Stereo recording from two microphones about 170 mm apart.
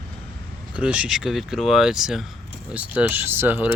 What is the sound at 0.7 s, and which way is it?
Speech, 5° right (ahead or behind).